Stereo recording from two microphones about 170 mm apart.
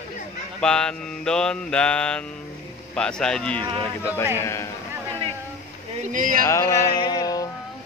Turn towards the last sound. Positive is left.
turn(degrees=20)  # may be behind; listen again after turning